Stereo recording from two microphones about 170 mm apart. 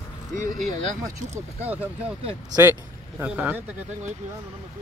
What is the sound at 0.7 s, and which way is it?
Speech, 40° right (ahead or behind).